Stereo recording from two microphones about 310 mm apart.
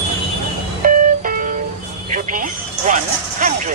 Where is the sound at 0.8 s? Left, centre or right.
Right.